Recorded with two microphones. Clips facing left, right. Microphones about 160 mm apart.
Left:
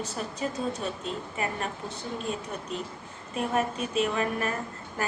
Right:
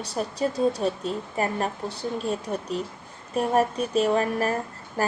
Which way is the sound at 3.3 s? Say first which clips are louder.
Right 6 dB; 40° right (ahead or behind).